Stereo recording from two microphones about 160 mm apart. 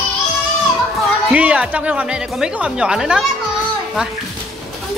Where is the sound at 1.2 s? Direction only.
10° right (ahead or behind).